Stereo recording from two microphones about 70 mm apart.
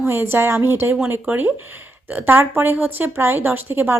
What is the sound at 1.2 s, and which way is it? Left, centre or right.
A woman's voice, right.